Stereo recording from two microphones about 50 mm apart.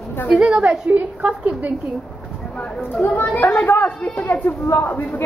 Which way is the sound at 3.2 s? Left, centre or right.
Left.